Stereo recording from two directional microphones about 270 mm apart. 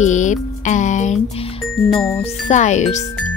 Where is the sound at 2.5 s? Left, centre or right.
Left.